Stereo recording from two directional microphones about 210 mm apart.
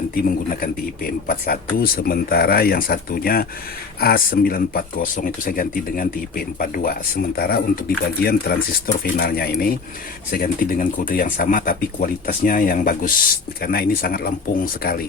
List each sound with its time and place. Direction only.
0.1 s speech: 45° left (ahead or behind)